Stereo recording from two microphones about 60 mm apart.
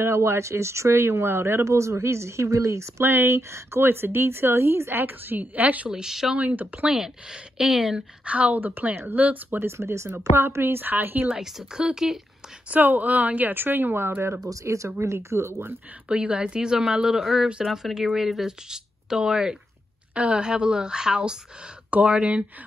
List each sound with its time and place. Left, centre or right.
0.0 s speech: right
3.0 s speech: right
5.9 s speech: centre
6.3 s speech: right
6.9 s speech: centre
8.3 s speech: right
9.7 s speech: right
10.1 s speech: right
11.3 s speech: centre
12.6 s speech: right
14.5 s speech: right
15.0 s speech: right
16.1 s speech: centre